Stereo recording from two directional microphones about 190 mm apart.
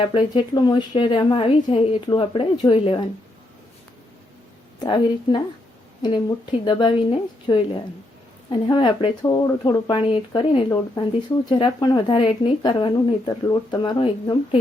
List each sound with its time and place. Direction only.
0.0 s speech: 25° left (ahead or behind)
4.8 s speech: 25° left (ahead or behind)